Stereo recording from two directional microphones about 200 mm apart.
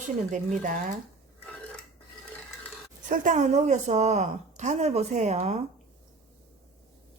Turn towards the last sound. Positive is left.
turn(degrees=-35)  # may be behind; listen again after turning